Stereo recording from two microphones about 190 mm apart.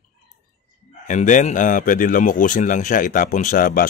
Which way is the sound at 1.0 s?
40° left (ahead or behind).